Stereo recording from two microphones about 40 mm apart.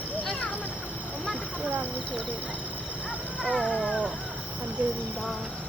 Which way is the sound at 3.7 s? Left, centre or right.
Centre.